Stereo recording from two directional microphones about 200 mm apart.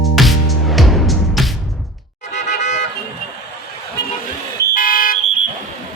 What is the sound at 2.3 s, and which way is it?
Music, 35° left (ahead or behind).